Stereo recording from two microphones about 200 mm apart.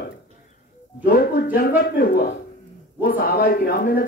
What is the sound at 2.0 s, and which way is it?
A man's voice, 45° left (ahead or behind).